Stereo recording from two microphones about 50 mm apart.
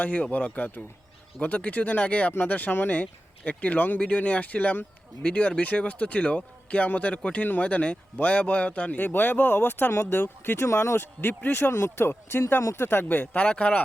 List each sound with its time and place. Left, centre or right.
0.0 s a man's voice: left
10.7 s speech: left
10.9 s speech: left
11.4 s speech: left
11.7 s speech: left
13.1 s a man's voice: left